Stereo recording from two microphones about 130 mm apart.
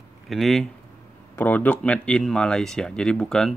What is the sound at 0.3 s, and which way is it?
Speech, centre (ahead or behind).